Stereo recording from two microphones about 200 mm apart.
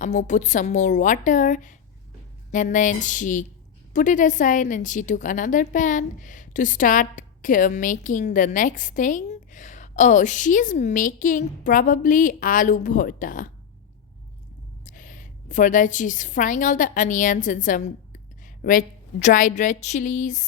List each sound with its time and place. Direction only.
0.0 s a woman's voice: 40° left (ahead or behind)
14.8 s a woman's voice: 40° left (ahead or behind)